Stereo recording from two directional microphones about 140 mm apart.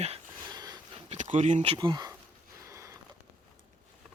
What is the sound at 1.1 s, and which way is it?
Speech, 60° right (ahead or behind).